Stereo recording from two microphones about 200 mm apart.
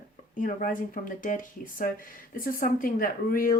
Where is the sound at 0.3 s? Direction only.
40° left (ahead or behind).